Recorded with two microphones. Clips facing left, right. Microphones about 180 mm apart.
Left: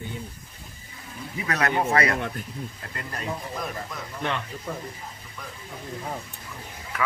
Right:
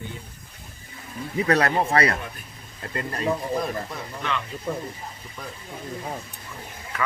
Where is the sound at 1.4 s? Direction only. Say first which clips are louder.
Right 4 dB; 35° right (ahead or behind).